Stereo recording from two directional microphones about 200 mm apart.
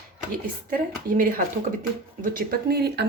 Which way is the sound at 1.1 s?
45° right (ahead or behind).